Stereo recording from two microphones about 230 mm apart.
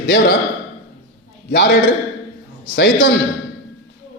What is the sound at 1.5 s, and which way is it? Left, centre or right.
Speech, left.